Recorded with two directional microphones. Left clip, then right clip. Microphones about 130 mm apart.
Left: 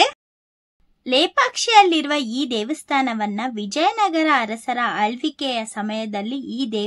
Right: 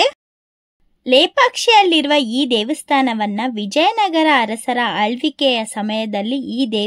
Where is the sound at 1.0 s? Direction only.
30° right (ahead or behind).